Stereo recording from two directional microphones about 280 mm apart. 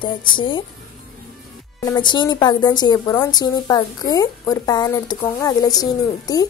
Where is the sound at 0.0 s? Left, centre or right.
Centre.